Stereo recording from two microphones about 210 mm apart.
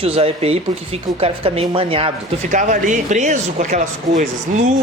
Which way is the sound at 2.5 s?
35° right (ahead or behind).